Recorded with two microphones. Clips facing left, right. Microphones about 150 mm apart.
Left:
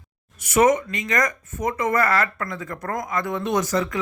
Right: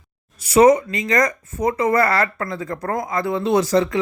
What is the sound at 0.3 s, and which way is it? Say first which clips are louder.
Speech: right 5 dB; 35° right (ahead or behind).